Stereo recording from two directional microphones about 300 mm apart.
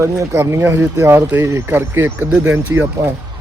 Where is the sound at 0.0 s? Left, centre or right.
Centre.